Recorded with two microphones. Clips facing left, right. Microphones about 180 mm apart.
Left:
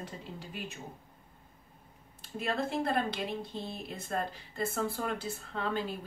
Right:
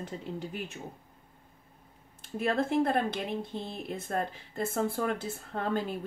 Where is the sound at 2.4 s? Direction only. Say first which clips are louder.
Right 5 dB; 50° right (ahead or behind).